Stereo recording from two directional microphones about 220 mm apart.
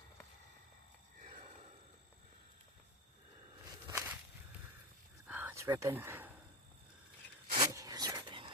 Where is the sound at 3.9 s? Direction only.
10° right (ahead or behind).